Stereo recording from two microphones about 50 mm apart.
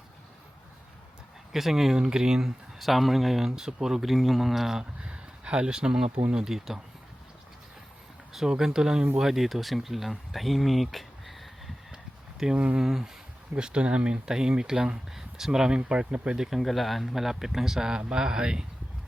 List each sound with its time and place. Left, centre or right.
1.5 s speech: centre
2.7 s speech: centre
5.0 s a sound: centre
6.3 s speech: centre
8.3 s speech: centre
12.5 s speech: right
12.8 s speech: centre
13.6 s speech: right
16.4 s speech: centre